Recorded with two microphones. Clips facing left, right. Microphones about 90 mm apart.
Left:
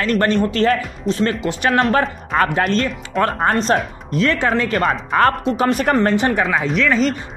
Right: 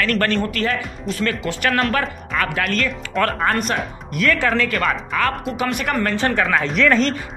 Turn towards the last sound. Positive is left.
turn(degrees=5)  # may be behind; listen again after turning